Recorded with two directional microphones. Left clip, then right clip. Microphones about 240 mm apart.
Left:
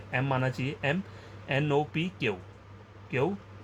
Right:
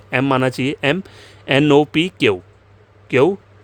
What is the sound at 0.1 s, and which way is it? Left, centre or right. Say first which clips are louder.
Speech: right 13 dB; right.